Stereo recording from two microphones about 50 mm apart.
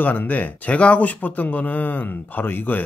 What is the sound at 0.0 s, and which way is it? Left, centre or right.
Speech, left.